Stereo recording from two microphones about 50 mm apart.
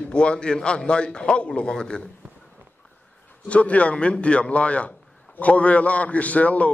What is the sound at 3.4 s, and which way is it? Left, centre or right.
A man's voice, left.